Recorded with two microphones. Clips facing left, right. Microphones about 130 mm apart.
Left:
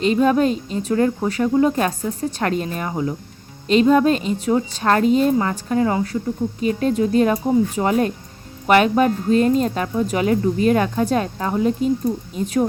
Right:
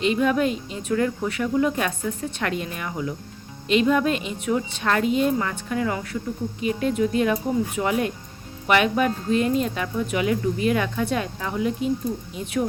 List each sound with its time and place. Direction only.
0.0 s speech: 35° left (ahead or behind)